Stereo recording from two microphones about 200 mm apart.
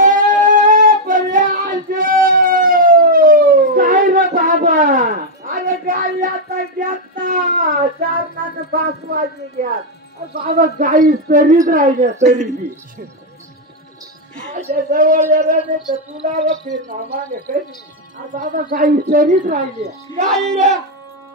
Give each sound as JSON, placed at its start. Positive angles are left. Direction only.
{"t": 0.0, "sound": "child singing", "side_deg": -40}
{"t": 10.3, "sound": "a man's voice", "side_deg": -45}
{"t": 14.5, "sound": "a woman's voice", "side_deg": -40}